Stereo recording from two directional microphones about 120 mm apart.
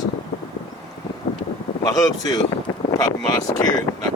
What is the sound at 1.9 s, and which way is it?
Speech, 30° left (ahead or behind).